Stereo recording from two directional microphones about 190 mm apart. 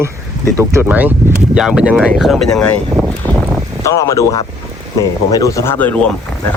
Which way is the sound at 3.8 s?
15° left (ahead or behind).